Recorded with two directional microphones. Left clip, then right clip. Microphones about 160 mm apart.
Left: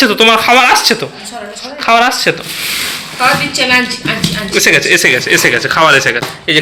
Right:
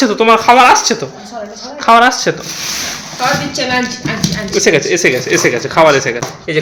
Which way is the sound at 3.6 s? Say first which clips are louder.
Left 5 dB; 50° right (ahead or behind).